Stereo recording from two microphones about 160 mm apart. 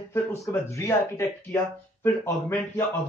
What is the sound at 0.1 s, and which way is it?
Speech, 15° left (ahead or behind).